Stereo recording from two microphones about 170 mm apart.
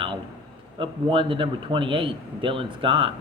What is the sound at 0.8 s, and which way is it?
Speech, 30° right (ahead or behind).